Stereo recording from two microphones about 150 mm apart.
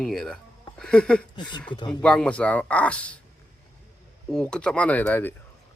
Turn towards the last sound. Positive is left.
turn(degrees=10)  # may be behind; listen again after turning